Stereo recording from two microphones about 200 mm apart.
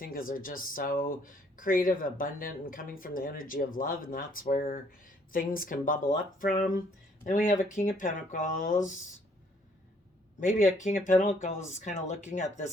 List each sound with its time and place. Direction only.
0.0 s speech: 45° left (ahead or behind)
10.8 s speech: 40° left (ahead or behind)